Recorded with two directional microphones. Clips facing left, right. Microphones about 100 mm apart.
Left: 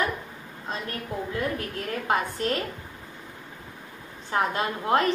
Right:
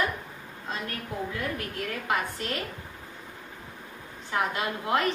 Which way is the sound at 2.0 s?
30° left (ahead or behind).